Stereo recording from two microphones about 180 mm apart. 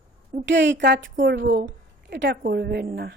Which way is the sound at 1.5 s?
60° right (ahead or behind).